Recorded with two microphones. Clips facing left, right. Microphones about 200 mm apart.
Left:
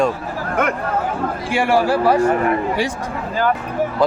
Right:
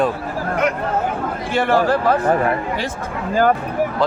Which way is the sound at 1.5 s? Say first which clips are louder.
Even; 10° left (ahead or behind).